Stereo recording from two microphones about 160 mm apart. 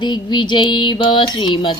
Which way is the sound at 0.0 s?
30° left (ahead or behind).